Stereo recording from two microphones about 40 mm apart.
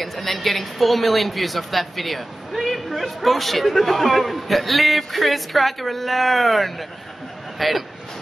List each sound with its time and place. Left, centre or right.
0.0 s a man's voice: centre